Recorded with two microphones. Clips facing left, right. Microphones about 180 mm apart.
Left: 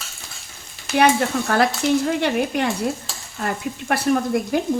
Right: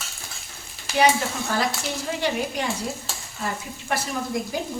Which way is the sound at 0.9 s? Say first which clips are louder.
Left 4 dB; 60° left (ahead or behind).